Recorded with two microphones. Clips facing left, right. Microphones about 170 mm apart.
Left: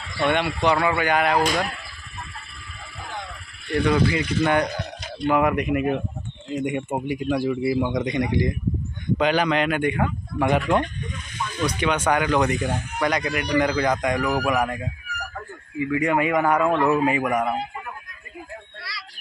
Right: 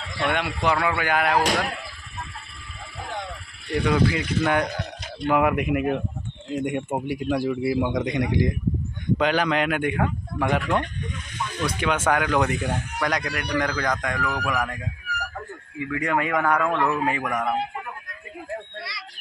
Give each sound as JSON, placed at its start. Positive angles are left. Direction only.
{"t": 0.3, "sound": "speech", "side_deg": -5}
{"t": 3.8, "sound": "speech", "side_deg": -5}
{"t": 10.4, "sound": "speech", "side_deg": 5}
{"t": 11.6, "sound": "speech", "side_deg": -5}
{"t": 15.8, "sound": "speech", "side_deg": 5}
{"t": 18.8, "sound": "a sound", "side_deg": -20}